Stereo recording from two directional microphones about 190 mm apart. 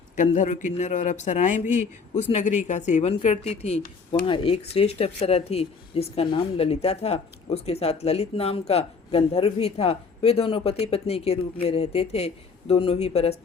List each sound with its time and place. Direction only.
0.2 s speech: 40° left (ahead or behind)